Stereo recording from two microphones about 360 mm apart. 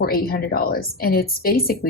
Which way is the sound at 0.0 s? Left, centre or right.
Left.